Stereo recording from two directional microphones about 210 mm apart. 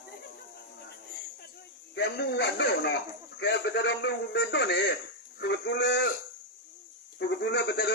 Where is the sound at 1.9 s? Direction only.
55° left (ahead or behind).